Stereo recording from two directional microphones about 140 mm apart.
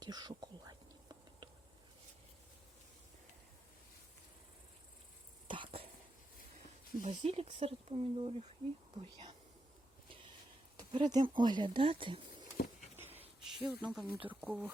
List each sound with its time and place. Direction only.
0.0 s whispering: 30° right (ahead or behind)
5.5 s a sound: 35° right (ahead or behind)
7.0 s speech: 60° right (ahead or behind)
11.0 s speech: 30° right (ahead or behind)
13.1 s a sound: 45° right (ahead or behind)
13.4 s speech: 5° right (ahead or behind)